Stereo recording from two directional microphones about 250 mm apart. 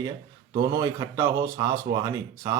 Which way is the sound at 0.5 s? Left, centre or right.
Centre.